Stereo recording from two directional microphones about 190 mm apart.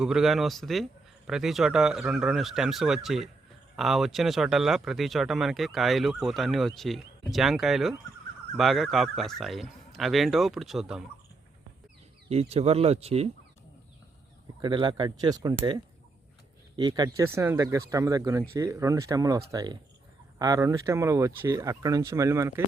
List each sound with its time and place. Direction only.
0.0 s speech: centre (ahead or behind)
12.3 s speech: 30° right (ahead or behind)
14.6 s speech: 25° right (ahead or behind)